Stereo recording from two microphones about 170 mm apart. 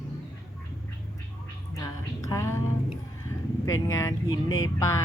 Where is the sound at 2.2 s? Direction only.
15° left (ahead or behind).